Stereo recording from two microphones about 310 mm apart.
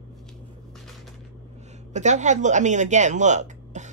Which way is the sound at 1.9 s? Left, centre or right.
Right.